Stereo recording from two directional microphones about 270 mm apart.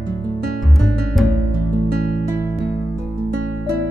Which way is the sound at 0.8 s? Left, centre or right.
Centre.